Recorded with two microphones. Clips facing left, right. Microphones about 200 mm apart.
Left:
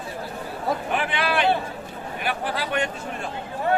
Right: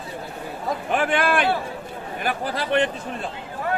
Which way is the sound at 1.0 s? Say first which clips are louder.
Right 4 dB; 45° right (ahead or behind).